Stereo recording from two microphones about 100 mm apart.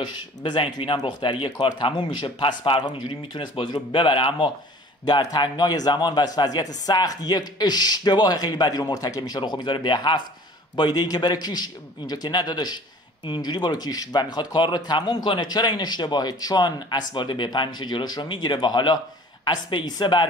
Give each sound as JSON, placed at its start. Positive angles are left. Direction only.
{"t": 0.0, "sound": "a man's voice", "side_deg": 50}
{"t": 5.0, "sound": "a man's voice", "side_deg": 45}